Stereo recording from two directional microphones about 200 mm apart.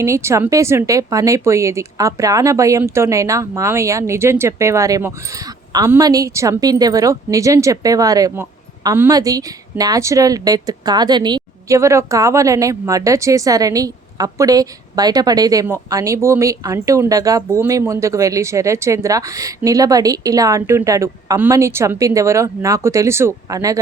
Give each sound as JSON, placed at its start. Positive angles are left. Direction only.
{"t": 0.0, "sound": "speech", "side_deg": -15}